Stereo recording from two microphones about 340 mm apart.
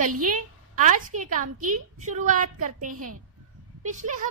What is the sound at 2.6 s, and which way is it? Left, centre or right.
Speech, right.